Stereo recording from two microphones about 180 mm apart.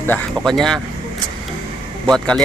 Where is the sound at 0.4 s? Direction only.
Centre (ahead or behind).